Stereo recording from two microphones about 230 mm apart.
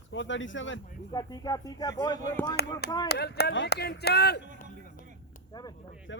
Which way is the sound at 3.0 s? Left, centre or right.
Left.